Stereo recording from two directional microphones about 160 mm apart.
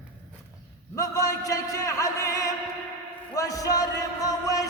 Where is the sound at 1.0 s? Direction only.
20° left (ahead or behind).